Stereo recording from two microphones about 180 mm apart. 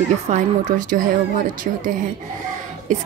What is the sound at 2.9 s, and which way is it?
Speech, 40° right (ahead or behind).